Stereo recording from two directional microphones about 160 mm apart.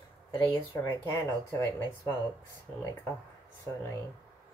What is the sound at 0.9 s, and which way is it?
Speech, 20° left (ahead or behind).